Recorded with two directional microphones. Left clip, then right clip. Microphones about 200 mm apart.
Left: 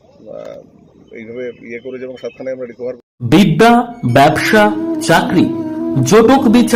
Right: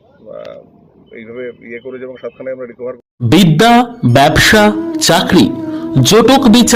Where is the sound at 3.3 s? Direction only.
25° right (ahead or behind).